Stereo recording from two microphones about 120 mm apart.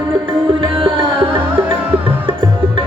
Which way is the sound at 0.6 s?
45° right (ahead or behind).